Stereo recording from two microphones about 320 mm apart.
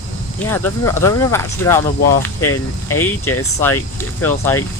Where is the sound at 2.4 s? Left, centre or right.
Left.